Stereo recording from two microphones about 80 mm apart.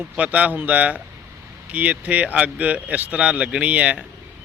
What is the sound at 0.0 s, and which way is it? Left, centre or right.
Speech, centre.